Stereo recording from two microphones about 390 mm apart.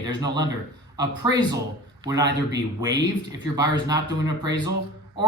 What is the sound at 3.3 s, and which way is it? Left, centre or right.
Speech, centre.